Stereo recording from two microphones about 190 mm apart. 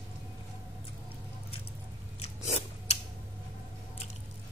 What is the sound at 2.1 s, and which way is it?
Biting, 35° left (ahead or behind).